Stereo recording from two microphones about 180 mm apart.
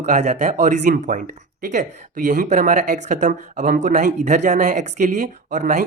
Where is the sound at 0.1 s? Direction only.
40° right (ahead or behind).